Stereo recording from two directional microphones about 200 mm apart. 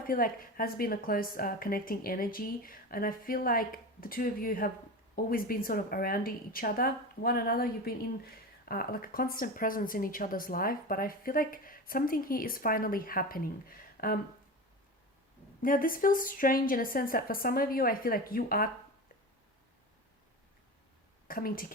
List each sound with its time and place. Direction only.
0.1 s speech: 45° left (ahead or behind)
15.6 s speech: 45° left (ahead or behind)
21.2 s a woman's voice: 45° left (ahead or behind)